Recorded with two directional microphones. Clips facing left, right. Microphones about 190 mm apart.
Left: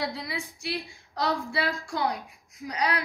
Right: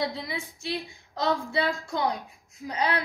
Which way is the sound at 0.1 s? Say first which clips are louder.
Even; 20° right (ahead or behind).